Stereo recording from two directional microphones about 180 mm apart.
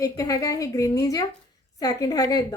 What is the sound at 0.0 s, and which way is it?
A woman's voice, 20° left (ahead or behind).